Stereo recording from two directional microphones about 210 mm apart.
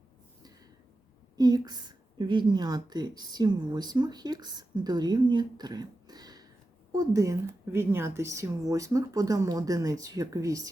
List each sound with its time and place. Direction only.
1.4 s a woman's voice: 20° right (ahead or behind)